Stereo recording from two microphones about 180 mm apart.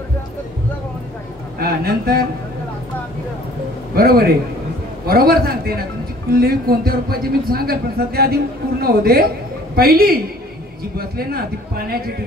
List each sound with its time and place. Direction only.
1.6 s speech: 55° right (ahead or behind)
3.9 s a man's voice: 55° right (ahead or behind)